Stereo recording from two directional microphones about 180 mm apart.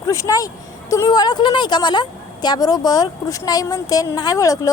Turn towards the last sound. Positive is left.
turn(degrees=20)  # may be behind; listen again after turning